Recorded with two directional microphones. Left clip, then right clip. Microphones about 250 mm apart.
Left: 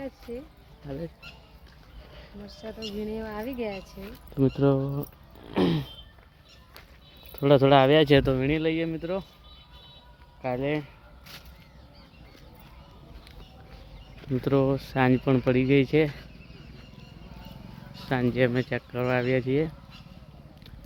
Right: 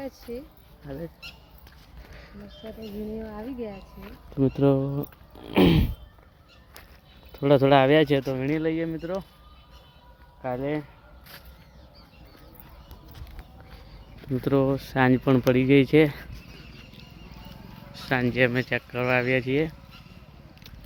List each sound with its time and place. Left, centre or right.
2.6 s speech: left
4.4 s speech: centre
5.4 s speech: centre
7.3 s speech: centre
10.4 s speech: centre
14.2 s speech: centre
17.9 s speech: centre